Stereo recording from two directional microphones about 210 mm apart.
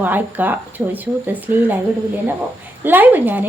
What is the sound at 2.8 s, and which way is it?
Speech, 10° right (ahead or behind).